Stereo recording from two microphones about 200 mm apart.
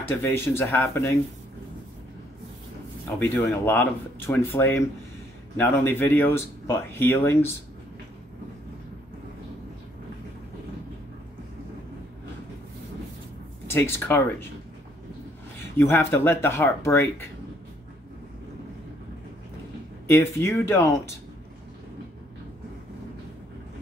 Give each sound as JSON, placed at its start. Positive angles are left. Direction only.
{"t": 0.0, "sound": "speech", "side_deg": 10}
{"t": 3.2, "sound": "speech", "side_deg": 10}
{"t": 13.7, "sound": "speech", "side_deg": 10}
{"t": 15.8, "sound": "speech", "side_deg": 10}
{"t": 20.1, "sound": "speech", "side_deg": 10}